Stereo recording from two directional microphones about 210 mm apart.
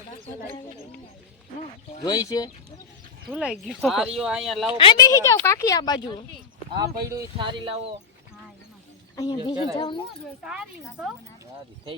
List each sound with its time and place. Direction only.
2.0 s a woman's voice: 15° left (ahead or behind)
3.2 s speech: 5° right (ahead or behind)
4.8 s a woman's voice: 20° left (ahead or behind)
6.7 s speech: 15° right (ahead or behind)
9.1 s speech: 20° left (ahead or behind)
10.4 s speech: 5° right (ahead or behind)